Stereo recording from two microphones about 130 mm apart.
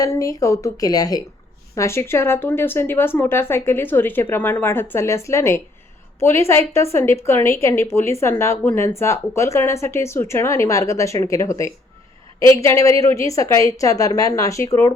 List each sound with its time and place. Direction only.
0.0 s a woman's voice: 25° left (ahead or behind)